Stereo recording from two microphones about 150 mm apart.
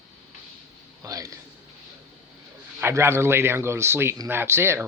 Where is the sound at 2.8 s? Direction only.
15° right (ahead or behind).